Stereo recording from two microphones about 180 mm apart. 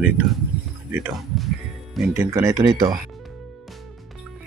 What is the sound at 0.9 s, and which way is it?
Speech, 5° right (ahead or behind).